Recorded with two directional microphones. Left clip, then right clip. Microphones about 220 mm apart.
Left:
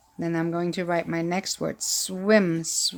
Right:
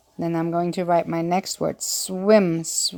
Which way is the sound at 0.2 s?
15° right (ahead or behind).